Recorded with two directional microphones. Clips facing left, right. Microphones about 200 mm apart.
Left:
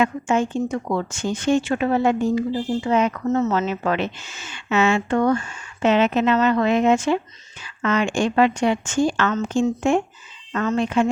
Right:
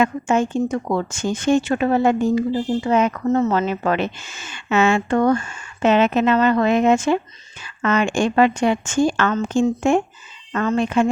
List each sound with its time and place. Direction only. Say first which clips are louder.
0.0 s speech: right 2 dB; 45° right (ahead or behind)
3.2 s speech: right 2 dB; 35° right (ahead or behind)
3.5 s speech: right 2 dB; 55° right (ahead or behind)
10.8 s speech: right 1 dB; 50° right (ahead or behind)